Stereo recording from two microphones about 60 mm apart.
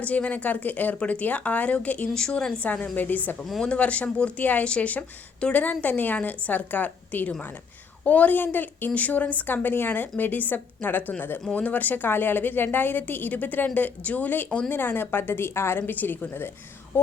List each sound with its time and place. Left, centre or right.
0.3 s speech: left
2.1 s a woman's voice: centre
2.6 s a woman's voice: left
15.9 s a woman's voice: left